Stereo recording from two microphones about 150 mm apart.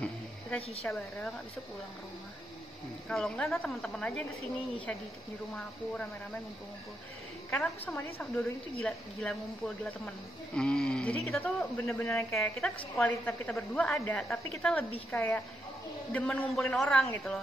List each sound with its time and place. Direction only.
0.0 s a sound: 10° left (ahead or behind)
0.8 s speech: 5° left (ahead or behind)
3.1 s speech: 5° left (ahead or behind)
7.5 s a woman's voice: 10° left (ahead or behind)
13.9 s a woman's voice: 15° left (ahead or behind)
14.5 s a woman's voice: 5° left (ahead or behind)